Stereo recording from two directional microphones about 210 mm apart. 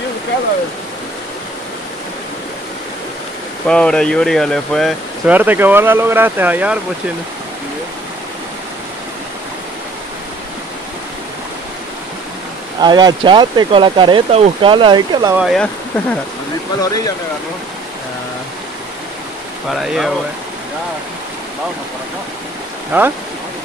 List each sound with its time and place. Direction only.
3.6 s speech: 5° left (ahead or behind)
12.8 s speech: 20° right (ahead or behind)
15.3 s speech: centre (ahead or behind)
19.7 s speech: centre (ahead or behind)
22.9 s speech: 10° right (ahead or behind)